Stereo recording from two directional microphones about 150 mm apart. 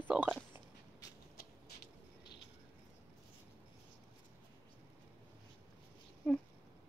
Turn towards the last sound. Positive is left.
turn(degrees=10)  # may be behind; listen again after turning